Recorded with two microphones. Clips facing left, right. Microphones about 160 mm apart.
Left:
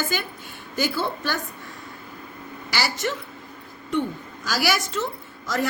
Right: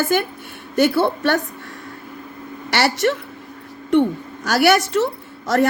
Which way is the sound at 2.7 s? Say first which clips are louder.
Right 8 dB; 65° right (ahead or behind).